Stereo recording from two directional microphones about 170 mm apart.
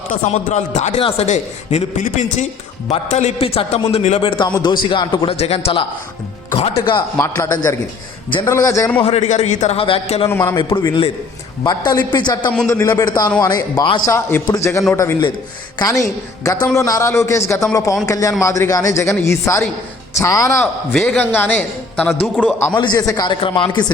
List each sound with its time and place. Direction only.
0.1 s a man's voice: 45° left (ahead or behind); by 7.0 s 30° left (ahead or behind)
7.2 s a man's voice: 15° left (ahead or behind)
9.0 s a man's voice: 35° left (ahead or behind)
14.1 s a man's voice: 15° left (ahead or behind)
22.7 s speech: 25° left (ahead or behind)